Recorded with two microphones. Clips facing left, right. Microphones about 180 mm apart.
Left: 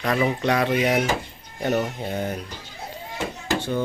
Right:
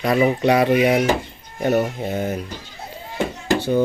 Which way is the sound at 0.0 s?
10° right (ahead or behind).